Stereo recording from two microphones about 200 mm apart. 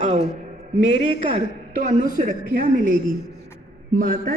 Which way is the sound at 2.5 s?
45° right (ahead or behind).